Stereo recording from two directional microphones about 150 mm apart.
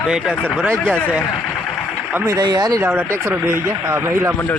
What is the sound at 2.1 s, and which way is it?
Speech, 15° right (ahead or behind).